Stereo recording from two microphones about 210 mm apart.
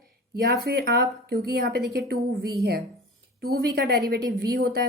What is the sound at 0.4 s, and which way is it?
A woman's voice, 50° right (ahead or behind).